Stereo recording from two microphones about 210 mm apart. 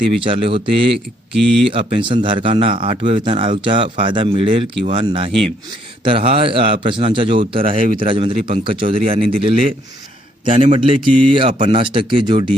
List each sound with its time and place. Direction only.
0.1 s speech: 25° right (ahead or behind)
0.9 s speech: centre (ahead or behind)
1.7 s speech: 25° right (ahead or behind)